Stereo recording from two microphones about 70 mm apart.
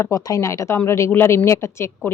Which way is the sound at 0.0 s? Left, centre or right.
Left.